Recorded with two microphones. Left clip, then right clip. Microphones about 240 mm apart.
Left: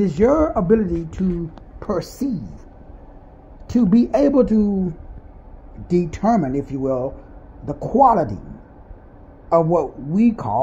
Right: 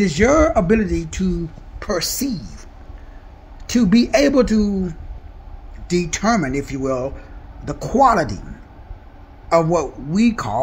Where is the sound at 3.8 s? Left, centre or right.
Right.